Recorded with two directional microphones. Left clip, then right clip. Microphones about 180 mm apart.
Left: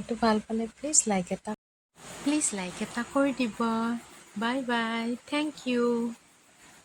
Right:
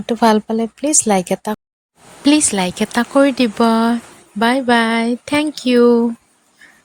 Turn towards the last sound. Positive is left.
turn(degrees=-50)  # may be behind; listen again after turning